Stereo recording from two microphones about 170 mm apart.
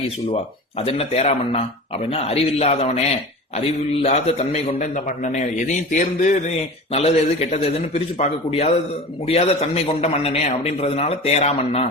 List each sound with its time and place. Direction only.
0.8 s a man's voice: 35° left (ahead or behind)
4.0 s a man's voice: 40° left (ahead or behind)